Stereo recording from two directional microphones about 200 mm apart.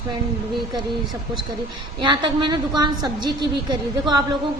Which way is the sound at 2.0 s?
25° right (ahead or behind).